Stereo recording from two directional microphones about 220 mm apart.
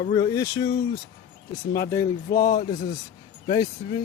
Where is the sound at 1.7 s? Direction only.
15° left (ahead or behind).